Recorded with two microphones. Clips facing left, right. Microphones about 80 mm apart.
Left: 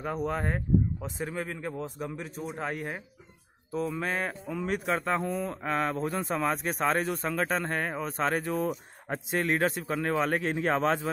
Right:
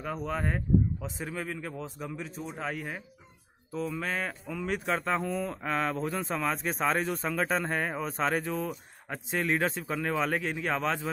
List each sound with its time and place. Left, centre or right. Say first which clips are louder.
0.0 s speech: left 2 dB; centre
1.0 s speech: left 2 dB; centre
1.3 s speech: left 2 dB; centre
4.6 s speech: left 1 dB; centre
8.5 s speech: left 4 dB; centre
9.4 s speech: left 1 dB; centre
10.4 s speech: left 4 dB; left